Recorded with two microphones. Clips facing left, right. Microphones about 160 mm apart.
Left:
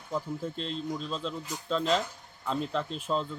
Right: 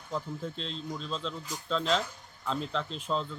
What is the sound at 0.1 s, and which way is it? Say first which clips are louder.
Speech: left 2 dB; 5° left (ahead or behind).